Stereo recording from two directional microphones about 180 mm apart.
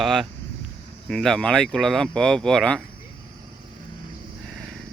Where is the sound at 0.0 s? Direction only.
Centre (ahead or behind).